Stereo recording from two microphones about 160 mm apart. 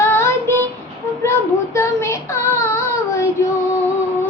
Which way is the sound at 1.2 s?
15° left (ahead or behind).